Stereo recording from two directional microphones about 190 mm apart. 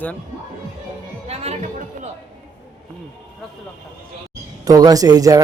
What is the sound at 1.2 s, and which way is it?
Chatter, 35° right (ahead or behind).